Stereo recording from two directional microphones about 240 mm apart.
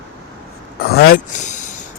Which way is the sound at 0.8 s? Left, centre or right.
Left.